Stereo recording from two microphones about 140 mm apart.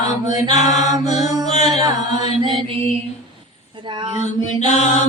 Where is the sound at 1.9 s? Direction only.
55° left (ahead or behind).